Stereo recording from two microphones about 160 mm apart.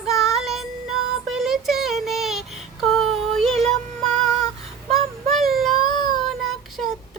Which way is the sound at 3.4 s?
Centre (ahead or behind).